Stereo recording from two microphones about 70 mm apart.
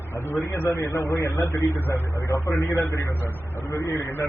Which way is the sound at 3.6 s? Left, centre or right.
Left.